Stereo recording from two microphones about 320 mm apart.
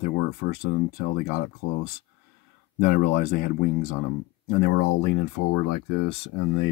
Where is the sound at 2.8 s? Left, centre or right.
Left.